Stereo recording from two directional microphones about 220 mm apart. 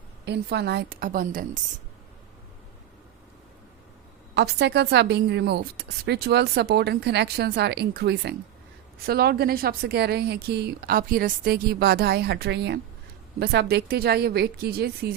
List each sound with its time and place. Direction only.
0.3 s a woman's voice: 50° right (ahead or behind)
4.4 s a woman's voice: 50° right (ahead or behind)